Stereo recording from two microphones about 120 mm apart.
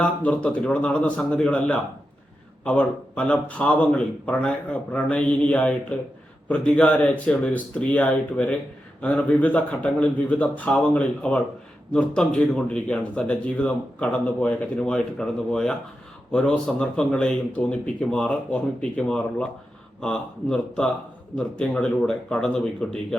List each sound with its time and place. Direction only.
0.0 s a man's voice: 10° left (ahead or behind)